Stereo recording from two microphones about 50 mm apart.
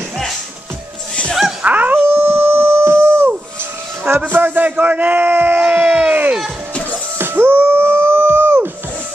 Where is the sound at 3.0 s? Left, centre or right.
Right.